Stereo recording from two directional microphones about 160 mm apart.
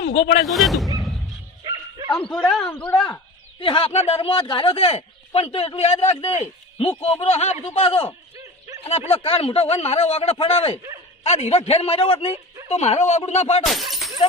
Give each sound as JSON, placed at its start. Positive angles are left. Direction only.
{"t": 0.0, "sound": "speech", "side_deg": 85}
{"t": 0.4, "sound": "speech", "side_deg": 0}
{"t": 0.9, "sound": "a sound", "side_deg": 0}
{"t": 2.5, "sound": "speech", "side_deg": 5}
{"t": 3.6, "sound": "speech", "side_deg": 35}
{"t": 13.7, "sound": "speech", "side_deg": 0}